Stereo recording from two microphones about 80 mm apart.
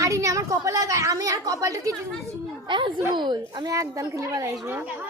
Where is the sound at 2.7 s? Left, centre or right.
Right.